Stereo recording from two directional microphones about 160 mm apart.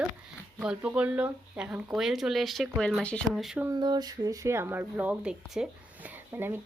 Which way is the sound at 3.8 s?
25° right (ahead or behind).